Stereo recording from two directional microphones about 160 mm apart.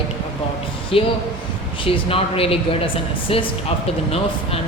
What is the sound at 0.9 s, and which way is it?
Speech, 35° left (ahead or behind).